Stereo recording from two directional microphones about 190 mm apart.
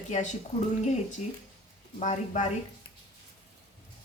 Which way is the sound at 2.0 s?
40° left (ahead or behind).